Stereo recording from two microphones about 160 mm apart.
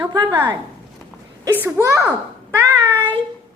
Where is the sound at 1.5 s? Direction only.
10° right (ahead or behind).